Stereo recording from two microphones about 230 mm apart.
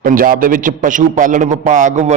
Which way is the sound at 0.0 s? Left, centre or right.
Right.